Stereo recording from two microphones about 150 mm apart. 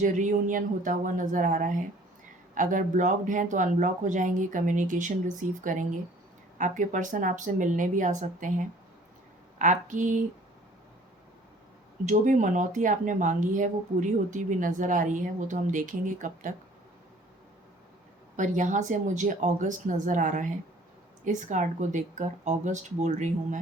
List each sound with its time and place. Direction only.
0.0 s speech: 55° right (ahead or behind)
12.0 s speech: 55° right (ahead or behind)
18.3 s speech: 55° right (ahead or behind)